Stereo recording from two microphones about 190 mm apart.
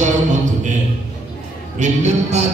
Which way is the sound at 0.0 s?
40° right (ahead or behind).